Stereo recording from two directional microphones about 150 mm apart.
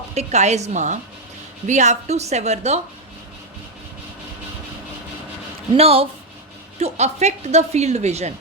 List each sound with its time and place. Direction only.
0.1 s a woman's voice: 45° right (ahead or behind)
5.7 s a woman's voice: 40° right (ahead or behind)